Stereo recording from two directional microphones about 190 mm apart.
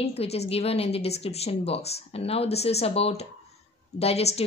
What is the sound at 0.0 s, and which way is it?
A woman's voice, 30° left (ahead or behind).